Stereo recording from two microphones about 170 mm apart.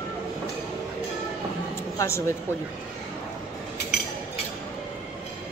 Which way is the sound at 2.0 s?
15° left (ahead or behind).